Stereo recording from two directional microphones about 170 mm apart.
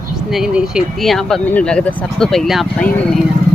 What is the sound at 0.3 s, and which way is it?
Speech, 5° right (ahead or behind).